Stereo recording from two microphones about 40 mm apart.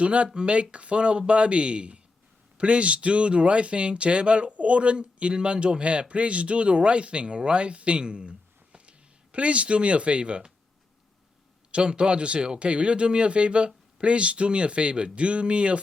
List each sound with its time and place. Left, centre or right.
0.0 s speech: right
11.7 s speech: right